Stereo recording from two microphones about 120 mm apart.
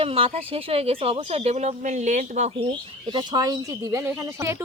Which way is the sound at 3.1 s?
35° right (ahead or behind).